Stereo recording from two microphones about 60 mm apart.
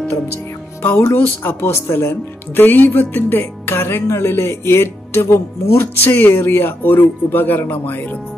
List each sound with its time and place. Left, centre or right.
0.8 s speech: left
2.5 s speech: left
6.0 s speech: left